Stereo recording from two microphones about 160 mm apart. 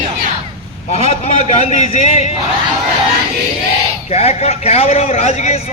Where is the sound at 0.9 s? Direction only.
40° left (ahead or behind).